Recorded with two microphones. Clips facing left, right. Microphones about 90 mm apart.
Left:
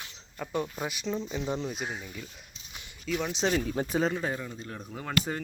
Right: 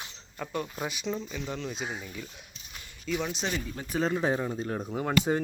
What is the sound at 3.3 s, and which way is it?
Speech, 25° left (ahead or behind).